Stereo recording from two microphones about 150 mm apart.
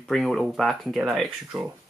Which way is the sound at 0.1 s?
Centre (ahead or behind).